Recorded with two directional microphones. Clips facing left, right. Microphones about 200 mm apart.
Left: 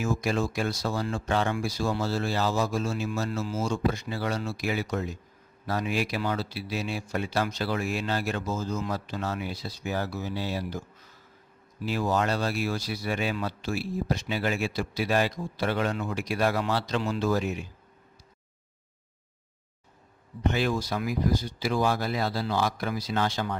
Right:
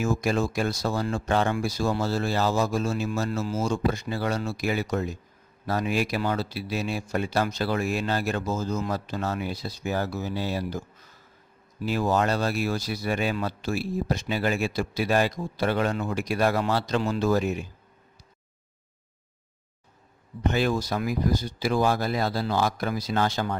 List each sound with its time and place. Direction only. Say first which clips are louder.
0.0 s speech: right 2 dB; 45° right (ahead or behind)
11.9 s speech: right 2 dB; 45° right (ahead or behind)
20.5 s speech: right 2 dB; 45° right (ahead or behind)